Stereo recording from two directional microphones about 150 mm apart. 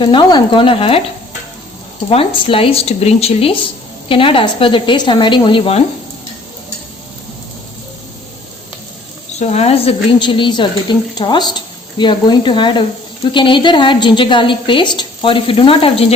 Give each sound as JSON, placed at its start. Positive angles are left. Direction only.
{"t": 0.0, "sound": "a woman's voice", "side_deg": 30}
{"t": 2.0, "sound": "a woman's voice", "side_deg": 40}
{"t": 9.4, "sound": "a woman's voice", "side_deg": 45}